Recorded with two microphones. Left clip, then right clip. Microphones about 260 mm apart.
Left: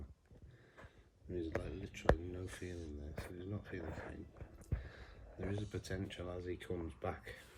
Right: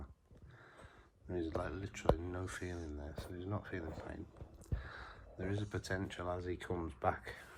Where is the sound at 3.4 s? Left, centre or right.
Centre.